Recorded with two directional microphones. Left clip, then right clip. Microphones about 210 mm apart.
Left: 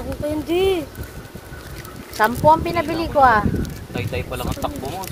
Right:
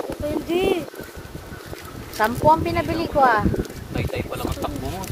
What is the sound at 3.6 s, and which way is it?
Speech, 40° left (ahead or behind).